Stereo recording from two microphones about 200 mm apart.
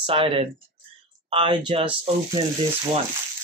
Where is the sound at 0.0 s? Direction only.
25° right (ahead or behind).